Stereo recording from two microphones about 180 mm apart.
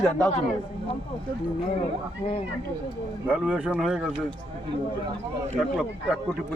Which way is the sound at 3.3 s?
10° right (ahead or behind).